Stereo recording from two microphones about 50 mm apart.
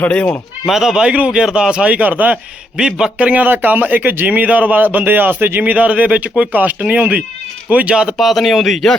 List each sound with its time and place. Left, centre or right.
0.1 s speech: left
0.6 s speech: centre; by 2.4 s right
2.7 s speech: centre
3.2 s speech: right
3.4 s a man's voice: right
5.7 s speech: right
6.5 s a man's voice: right
8.2 s speech: centre